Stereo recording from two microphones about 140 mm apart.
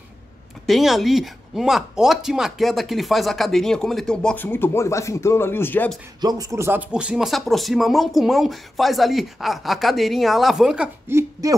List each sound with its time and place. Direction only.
0.7 s speech: centre (ahead or behind); by 5.9 s 15° left (ahead or behind)
6.2 s speech: 25° right (ahead or behind); by 10.9 s 5° right (ahead or behind)
11.1 s speech: 20° right (ahead or behind)